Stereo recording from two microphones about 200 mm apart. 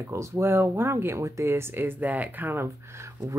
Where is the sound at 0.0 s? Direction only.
15° right (ahead or behind).